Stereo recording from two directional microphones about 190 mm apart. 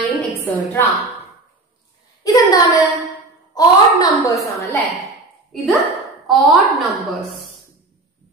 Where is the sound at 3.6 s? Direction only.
20° left (ahead or behind).